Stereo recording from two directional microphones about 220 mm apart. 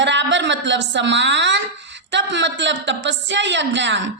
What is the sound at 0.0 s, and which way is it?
A woman's voice, 55° right (ahead or behind).